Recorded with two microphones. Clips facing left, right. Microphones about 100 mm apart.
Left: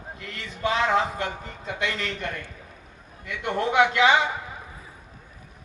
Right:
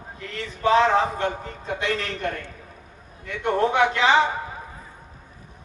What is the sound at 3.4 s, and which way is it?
Speech, 35° right (ahead or behind).